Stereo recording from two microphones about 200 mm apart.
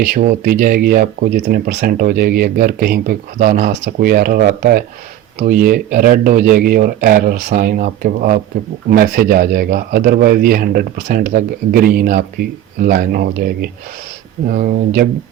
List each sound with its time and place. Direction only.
0.0 s speech: 45° right (ahead or behind)